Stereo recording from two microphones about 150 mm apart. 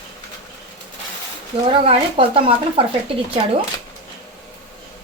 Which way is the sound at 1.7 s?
40° right (ahead or behind).